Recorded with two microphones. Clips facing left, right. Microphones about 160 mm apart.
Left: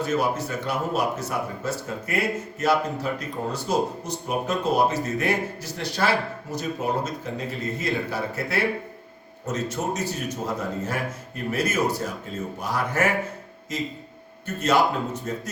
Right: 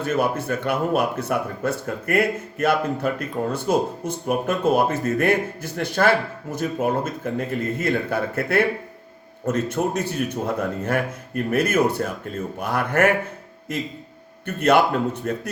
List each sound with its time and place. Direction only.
0.0 s speech: 55° right (ahead or behind)